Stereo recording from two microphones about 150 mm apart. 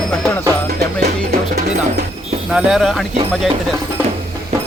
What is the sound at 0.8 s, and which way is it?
Music, 90° right.